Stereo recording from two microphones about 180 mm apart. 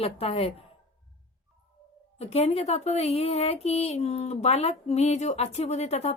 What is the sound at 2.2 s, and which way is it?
Speech, 35° left (ahead or behind).